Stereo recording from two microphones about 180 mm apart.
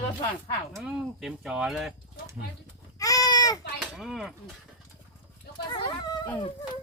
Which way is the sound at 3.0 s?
20° left (ahead or behind).